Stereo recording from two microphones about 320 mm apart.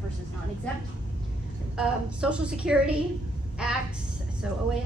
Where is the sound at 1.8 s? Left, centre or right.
Centre.